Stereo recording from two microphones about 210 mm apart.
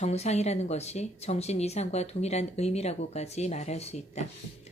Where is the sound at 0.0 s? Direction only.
30° left (ahead or behind).